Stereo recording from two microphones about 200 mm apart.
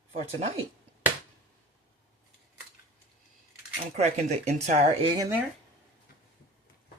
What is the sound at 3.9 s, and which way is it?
Speech, 35° right (ahead or behind).